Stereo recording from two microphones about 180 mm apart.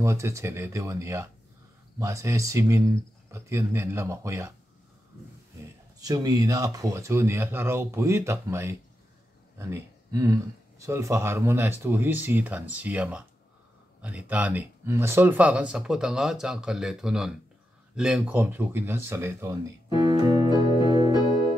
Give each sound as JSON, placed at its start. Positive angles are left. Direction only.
{"t": 0.0, "sound": "speech", "side_deg": -15}
{"t": 5.9, "sound": "speech", "side_deg": -20}
{"t": 20.2, "sound": "organ", "side_deg": 25}